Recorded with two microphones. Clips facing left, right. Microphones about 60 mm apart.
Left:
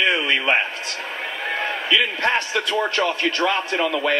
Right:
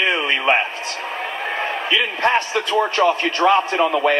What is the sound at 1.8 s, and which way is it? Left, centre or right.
A man's voice, right.